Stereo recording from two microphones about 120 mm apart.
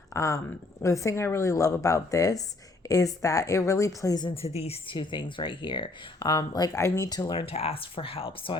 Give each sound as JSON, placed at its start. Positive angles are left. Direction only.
{"t": 0.1, "sound": "speech", "side_deg": 25}
{"t": 4.4, "sound": "speech", "side_deg": 55}
{"t": 7.3, "sound": "speech", "side_deg": 55}